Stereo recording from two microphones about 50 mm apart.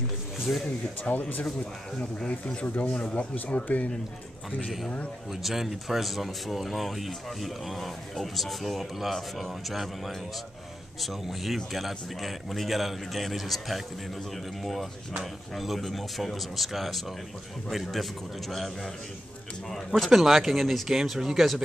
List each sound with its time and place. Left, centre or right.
0.5 s speech: left
5.3 s speech: centre
20.1 s speech: centre